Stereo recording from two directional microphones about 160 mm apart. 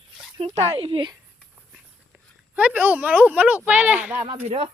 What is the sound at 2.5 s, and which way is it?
Speech, 10° right (ahead or behind).